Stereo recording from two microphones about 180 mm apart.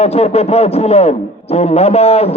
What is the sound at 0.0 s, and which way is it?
A man's voice, 35° left (ahead or behind).